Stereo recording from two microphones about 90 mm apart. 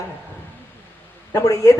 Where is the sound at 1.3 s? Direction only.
35° left (ahead or behind).